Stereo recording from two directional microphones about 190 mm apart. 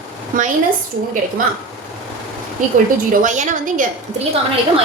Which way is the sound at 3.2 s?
40° right (ahead or behind).